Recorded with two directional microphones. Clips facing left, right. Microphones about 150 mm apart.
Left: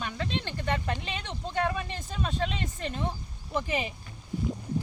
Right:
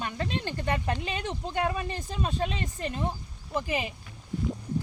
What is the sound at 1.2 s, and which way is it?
Speech, 10° right (ahead or behind).